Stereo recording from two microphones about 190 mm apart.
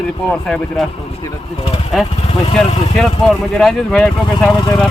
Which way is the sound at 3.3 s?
Centre (ahead or behind).